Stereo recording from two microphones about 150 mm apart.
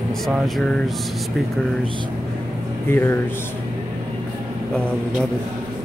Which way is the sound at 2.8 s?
15° left (ahead or behind).